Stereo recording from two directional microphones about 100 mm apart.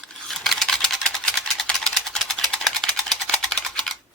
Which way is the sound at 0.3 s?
5° left (ahead or behind).